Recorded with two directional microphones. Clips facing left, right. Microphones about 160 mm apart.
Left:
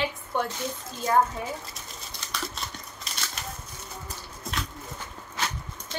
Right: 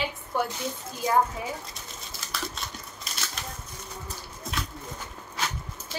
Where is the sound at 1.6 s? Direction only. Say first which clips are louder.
Even; centre (ahead or behind).